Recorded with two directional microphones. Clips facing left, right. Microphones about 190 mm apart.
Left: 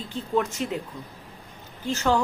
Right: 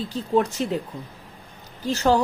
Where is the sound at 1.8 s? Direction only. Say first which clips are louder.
Right 4 dB; 35° right (ahead or behind).